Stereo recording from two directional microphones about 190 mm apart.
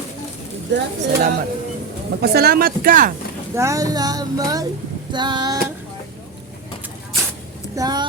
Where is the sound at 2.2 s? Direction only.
55° right (ahead or behind).